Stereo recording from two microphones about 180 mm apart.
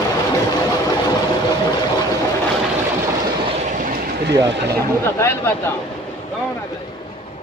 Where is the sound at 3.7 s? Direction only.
50° right (ahead or behind).